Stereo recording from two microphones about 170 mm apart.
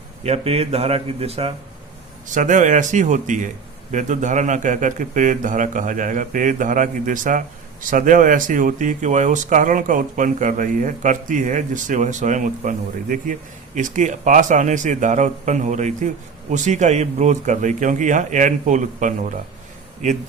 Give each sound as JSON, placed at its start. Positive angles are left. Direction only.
{"t": 0.2, "sound": "speech", "side_deg": -35}
{"t": 2.3, "sound": "speech", "side_deg": -50}